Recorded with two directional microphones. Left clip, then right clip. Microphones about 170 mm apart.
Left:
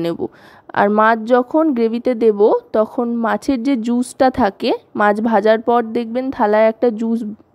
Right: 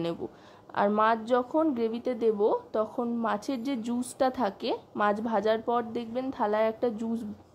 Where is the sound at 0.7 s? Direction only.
45° left (ahead or behind).